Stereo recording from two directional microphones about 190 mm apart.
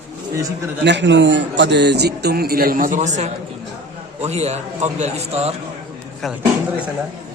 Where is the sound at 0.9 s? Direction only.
70° right (ahead or behind); by 5.5 s 35° right (ahead or behind).